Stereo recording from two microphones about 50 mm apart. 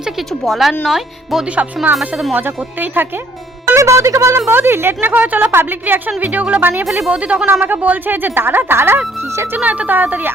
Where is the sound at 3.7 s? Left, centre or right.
Right.